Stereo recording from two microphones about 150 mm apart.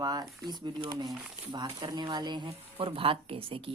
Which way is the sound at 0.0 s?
25° right (ahead or behind).